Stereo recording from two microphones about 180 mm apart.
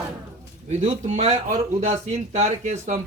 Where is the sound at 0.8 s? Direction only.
35° right (ahead or behind).